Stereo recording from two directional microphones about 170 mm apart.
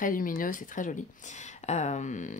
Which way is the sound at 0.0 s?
55° left (ahead or behind).